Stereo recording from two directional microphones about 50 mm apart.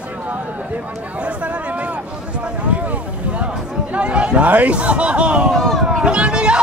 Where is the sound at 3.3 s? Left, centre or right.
Right.